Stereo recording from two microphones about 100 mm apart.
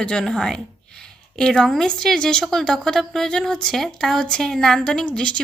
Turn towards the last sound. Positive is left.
turn(degrees=10)  # may be behind; listen again after turning